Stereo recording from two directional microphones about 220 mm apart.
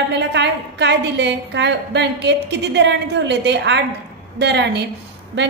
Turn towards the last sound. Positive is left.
turn(degrees=-50)  # may be behind; listen again after turning